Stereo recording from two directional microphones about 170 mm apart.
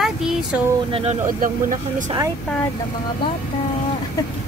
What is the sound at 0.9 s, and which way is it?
Speech, 35° right (ahead or behind).